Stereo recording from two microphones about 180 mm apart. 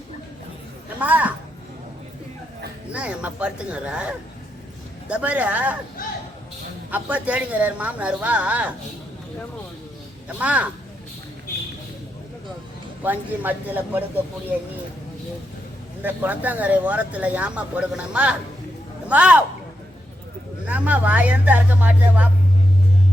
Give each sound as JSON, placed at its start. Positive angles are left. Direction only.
{"t": 0.9, "sound": "speech", "side_deg": -10}
{"t": 2.9, "sound": "speech", "side_deg": -5}
{"t": 6.9, "sound": "speech", "side_deg": -10}
{"t": 10.3, "sound": "speech", "side_deg": -10}
{"t": 13.0, "sound": "speech", "side_deg": -10}
{"t": 16.0, "sound": "a man's voice", "side_deg": -10}
{"t": 20.7, "sound": "speech", "side_deg": -10}